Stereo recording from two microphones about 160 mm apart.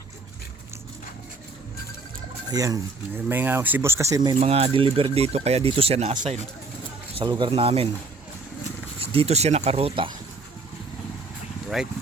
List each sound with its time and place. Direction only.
2.5 s speech: 20° right (ahead or behind)
4.4 s speech: 40° right (ahead or behind)
7.2 s speech: 30° right (ahead or behind)
9.0 s speech: 40° right (ahead or behind)
11.7 s speech: centre (ahead or behind)